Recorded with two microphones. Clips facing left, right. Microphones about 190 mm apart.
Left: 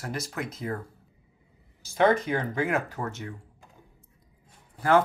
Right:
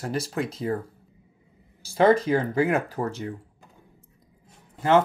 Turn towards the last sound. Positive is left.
turn(degrees=-20)  # may be behind; listen again after turning